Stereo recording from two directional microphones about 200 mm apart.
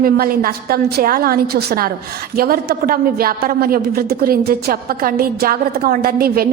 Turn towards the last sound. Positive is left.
turn(degrees=-50)  # may be behind; listen again after turning